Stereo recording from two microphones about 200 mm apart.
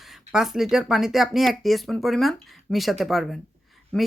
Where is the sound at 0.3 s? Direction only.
Centre (ahead or behind).